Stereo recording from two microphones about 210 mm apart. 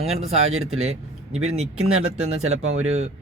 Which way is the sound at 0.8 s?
30° right (ahead or behind).